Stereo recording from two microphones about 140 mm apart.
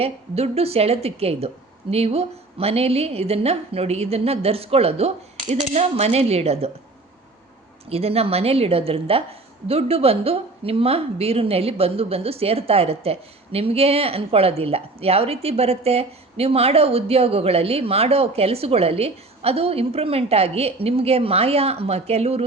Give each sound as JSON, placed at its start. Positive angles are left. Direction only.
{"t": 0.0, "sound": "a woman's voice", "side_deg": -45}
{"t": 7.9, "sound": "a woman's voice", "side_deg": -45}